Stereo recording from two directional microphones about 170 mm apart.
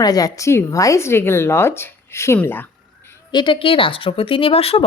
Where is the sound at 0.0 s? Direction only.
20° left (ahead or behind).